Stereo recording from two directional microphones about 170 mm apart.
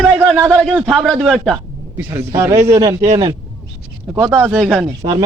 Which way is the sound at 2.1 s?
15° right (ahead or behind).